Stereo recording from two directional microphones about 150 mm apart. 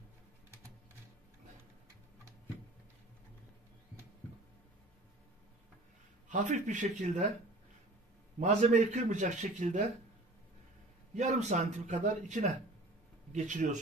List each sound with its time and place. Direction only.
6.2 s a man's voice: 55° right (ahead or behind)
8.4 s a man's voice: 50° right (ahead or behind)
11.1 s a man's voice: 50° right (ahead or behind)